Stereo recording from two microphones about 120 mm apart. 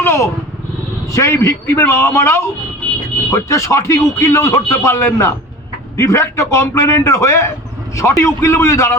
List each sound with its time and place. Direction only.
0.0 s vehicle: 20° left (ahead or behind)
1.0 s speech: 25° left (ahead or behind)